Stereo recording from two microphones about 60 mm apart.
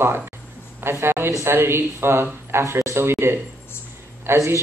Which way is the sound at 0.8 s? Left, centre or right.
Right.